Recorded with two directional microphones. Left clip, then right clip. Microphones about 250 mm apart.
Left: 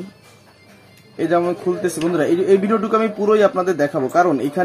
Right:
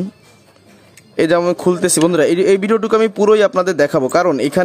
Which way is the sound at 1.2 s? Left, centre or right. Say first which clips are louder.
Right 5 dB; right.